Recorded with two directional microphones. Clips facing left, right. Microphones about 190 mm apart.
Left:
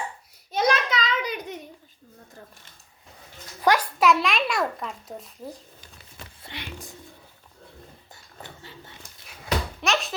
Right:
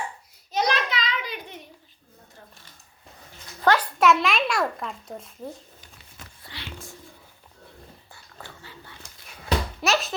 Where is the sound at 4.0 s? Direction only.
Centre (ahead or behind).